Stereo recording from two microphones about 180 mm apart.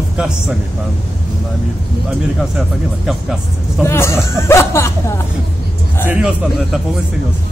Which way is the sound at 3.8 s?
15° left (ahead or behind).